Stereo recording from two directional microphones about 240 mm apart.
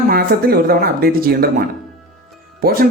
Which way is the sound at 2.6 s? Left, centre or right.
Right.